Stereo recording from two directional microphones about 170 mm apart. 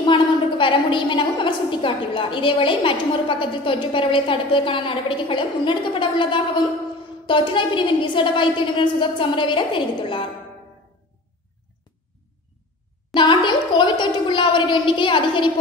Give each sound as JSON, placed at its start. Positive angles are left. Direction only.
{"t": 0.0, "sound": "a woman's voice", "side_deg": 30}
{"t": 13.1, "sound": "a woman's voice", "side_deg": 30}